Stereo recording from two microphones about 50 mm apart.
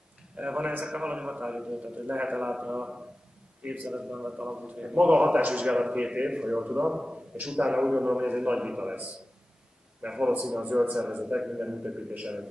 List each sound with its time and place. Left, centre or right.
0.4 s a man's voice: right
2.0 s a man's voice: right